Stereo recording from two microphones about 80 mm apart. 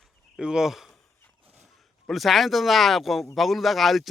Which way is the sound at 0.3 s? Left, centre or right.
Centre.